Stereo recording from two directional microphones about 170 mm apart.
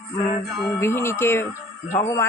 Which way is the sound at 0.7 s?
15° left (ahead or behind).